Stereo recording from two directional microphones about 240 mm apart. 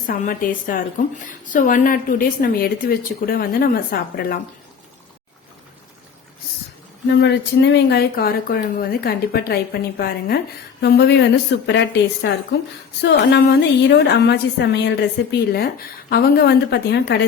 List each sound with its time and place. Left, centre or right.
0.1 s a woman's voice: left
7.1 s speech: left